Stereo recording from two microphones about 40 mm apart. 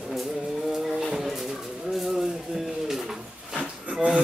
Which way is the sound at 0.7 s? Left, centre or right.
Centre.